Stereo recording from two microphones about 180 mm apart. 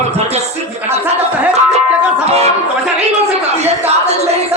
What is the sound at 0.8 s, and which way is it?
Speech, 10° right (ahead or behind).